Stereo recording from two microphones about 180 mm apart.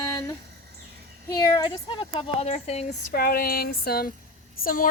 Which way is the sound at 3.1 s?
55° left (ahead or behind).